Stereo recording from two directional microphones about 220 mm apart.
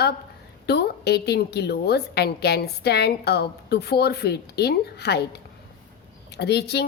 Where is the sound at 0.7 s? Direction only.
50° left (ahead or behind).